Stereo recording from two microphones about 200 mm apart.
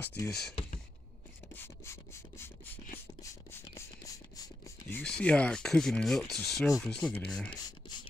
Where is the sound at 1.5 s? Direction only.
10° left (ahead or behind).